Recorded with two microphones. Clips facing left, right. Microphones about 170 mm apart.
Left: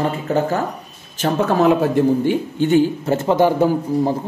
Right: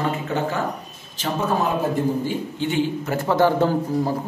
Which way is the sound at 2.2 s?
45° left (ahead or behind).